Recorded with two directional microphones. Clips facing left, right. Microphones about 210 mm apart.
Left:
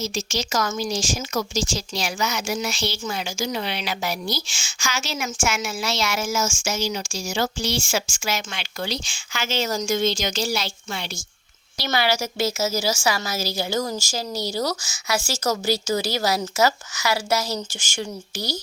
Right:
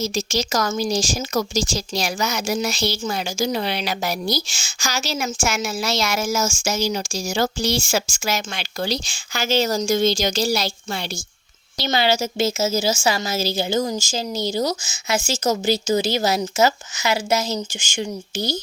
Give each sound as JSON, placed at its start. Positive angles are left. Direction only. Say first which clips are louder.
{"t": 0.0, "sound": "speech", "louder": "right 4 dB", "side_deg": -40}
{"t": 11.8, "sound": "a woman's voice", "louder": "right 3 dB", "side_deg": -25}